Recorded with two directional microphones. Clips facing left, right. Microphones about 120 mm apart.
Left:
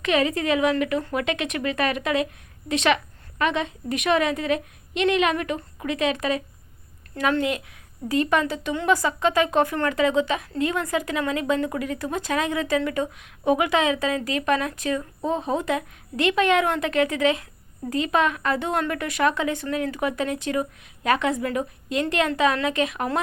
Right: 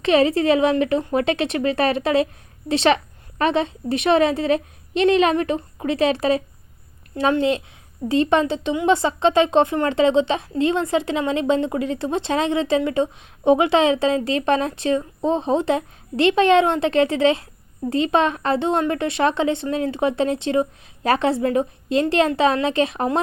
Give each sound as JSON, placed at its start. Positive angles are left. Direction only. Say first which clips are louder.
{"t": 0.0, "sound": "a woman's voice", "louder": "right 6 dB", "side_deg": -30}